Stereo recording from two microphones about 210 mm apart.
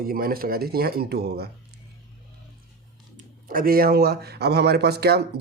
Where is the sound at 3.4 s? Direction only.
45° right (ahead or behind).